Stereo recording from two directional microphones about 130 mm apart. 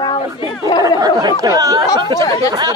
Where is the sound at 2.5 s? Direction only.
30° right (ahead or behind).